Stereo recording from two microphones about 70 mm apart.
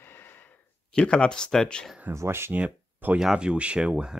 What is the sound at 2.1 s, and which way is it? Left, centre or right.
Speech, right.